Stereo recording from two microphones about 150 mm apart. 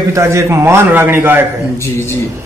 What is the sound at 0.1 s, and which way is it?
A man's voice, 20° right (ahead or behind).